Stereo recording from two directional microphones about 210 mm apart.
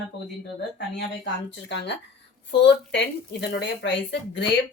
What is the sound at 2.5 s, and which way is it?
Speech, 55° left (ahead or behind).